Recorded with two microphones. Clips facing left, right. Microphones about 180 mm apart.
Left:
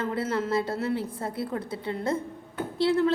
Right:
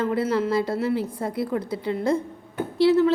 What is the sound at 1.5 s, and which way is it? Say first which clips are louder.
Speech: right 5 dB; 25° left (ahead or behind).